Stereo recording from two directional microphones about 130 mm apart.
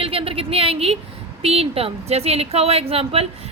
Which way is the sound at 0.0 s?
45° right (ahead or behind).